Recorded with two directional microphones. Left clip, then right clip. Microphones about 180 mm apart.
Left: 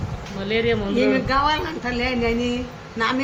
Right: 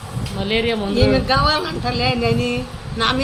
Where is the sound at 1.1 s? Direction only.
Centre (ahead or behind).